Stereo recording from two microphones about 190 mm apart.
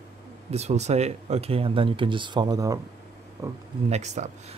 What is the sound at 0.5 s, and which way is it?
Speech, 35° right (ahead or behind).